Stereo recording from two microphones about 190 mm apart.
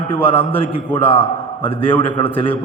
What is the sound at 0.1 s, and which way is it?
A man's voice, 30° left (ahead or behind).